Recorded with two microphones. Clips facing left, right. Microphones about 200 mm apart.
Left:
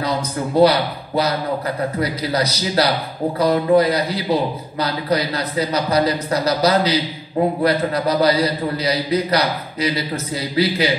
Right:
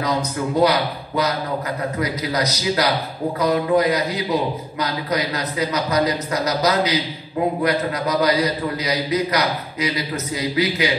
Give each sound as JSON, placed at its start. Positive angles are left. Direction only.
{"t": 0.6, "sound": "a man's voice", "side_deg": 30}